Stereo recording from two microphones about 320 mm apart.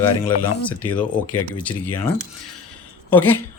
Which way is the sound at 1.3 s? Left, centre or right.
Left.